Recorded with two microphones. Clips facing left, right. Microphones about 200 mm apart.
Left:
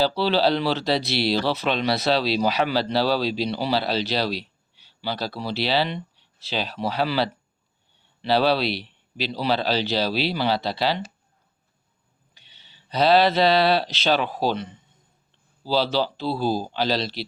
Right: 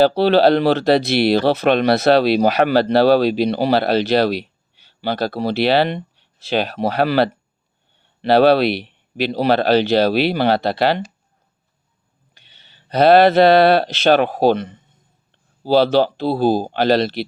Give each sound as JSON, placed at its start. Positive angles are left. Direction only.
{"t": 0.0, "sound": "speech", "side_deg": -55}
{"t": 12.3, "sound": "speech", "side_deg": -55}